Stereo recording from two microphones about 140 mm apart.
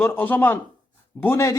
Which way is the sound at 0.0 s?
15° left (ahead or behind).